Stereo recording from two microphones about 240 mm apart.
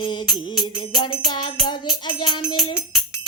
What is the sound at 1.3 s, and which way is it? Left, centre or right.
Music, centre.